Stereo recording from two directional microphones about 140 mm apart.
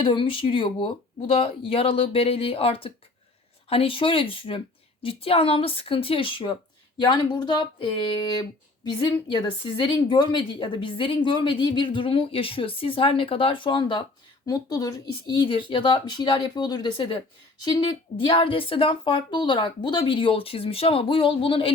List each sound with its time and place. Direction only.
0.0 s speech: 40° left (ahead or behind)